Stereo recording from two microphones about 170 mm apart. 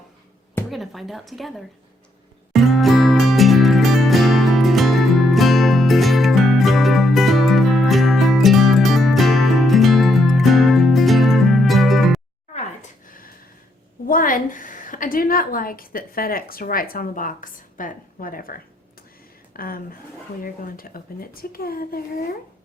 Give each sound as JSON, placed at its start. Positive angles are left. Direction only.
{"t": 0.7, "sound": "speech", "side_deg": 0}
{"t": 2.5, "sound": "music", "side_deg": 0}
{"t": 12.5, "sound": "a sound", "side_deg": 50}
{"t": 14.1, "sound": "a woman's voice", "side_deg": 55}
{"t": 19.5, "sound": "speech", "side_deg": 60}